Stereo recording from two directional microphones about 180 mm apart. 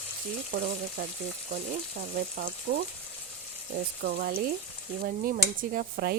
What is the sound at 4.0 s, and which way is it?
Speech, 60° right (ahead or behind).